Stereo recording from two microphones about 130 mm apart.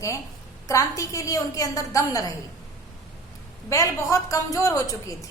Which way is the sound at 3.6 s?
25° left (ahead or behind).